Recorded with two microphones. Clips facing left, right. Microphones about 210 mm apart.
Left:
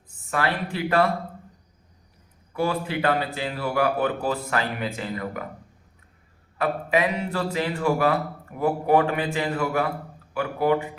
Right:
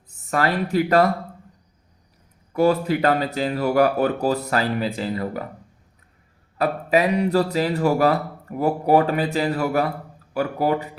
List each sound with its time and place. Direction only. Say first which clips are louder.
0.3 s speech: right 4 dB; 40° right (ahead or behind)
2.5 s speech: right 7 dB; 40° right (ahead or behind)
6.6 s speech: right 3 dB; 35° right (ahead or behind)